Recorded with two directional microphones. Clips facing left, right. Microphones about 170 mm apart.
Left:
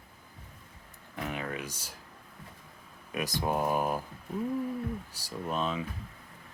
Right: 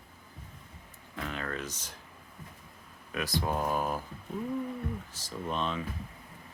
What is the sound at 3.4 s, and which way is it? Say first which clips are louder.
Speech: left 2 dB; 15° left (ahead or behind).